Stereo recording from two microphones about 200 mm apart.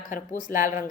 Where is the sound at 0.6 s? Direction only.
15° right (ahead or behind).